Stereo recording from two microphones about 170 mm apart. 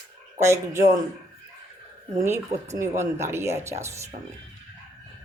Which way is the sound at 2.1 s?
15° right (ahead or behind).